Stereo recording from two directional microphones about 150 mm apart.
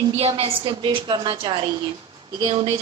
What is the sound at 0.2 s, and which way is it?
A woman's voice, 40° right (ahead or behind).